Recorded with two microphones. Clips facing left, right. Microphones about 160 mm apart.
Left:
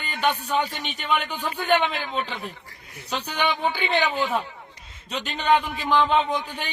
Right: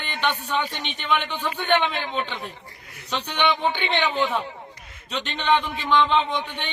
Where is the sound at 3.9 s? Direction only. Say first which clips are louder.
Left 3 dB; 10° left (ahead or behind).